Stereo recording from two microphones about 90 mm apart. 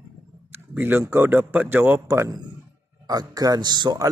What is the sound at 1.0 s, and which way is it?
A man's voice, 30° right (ahead or behind).